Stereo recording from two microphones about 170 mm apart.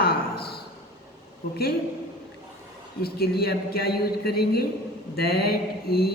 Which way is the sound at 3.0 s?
65° left (ahead or behind).